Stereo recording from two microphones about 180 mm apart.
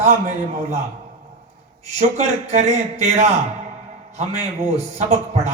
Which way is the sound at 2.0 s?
40° right (ahead or behind).